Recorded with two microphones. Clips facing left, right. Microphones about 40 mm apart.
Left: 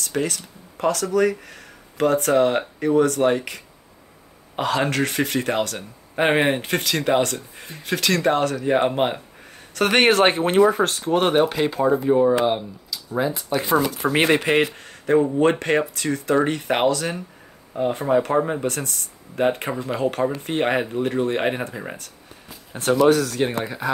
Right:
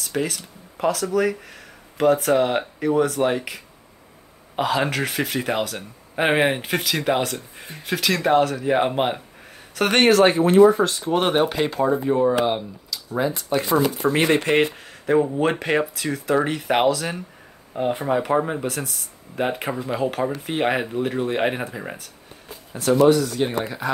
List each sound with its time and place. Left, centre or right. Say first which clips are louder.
0.0 s speech: left 1 dB; centre
10.0 s speech: right 4 dB; left
11.0 s speech: left 1 dB; centre
14.0 s speech: even; left
14.6 s speech: right 1 dB; centre
22.8 s speech: right 1 dB; left
23.6 s speech: even; centre